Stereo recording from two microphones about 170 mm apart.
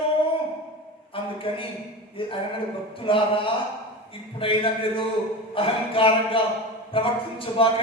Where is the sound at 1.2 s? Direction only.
30° left (ahead or behind).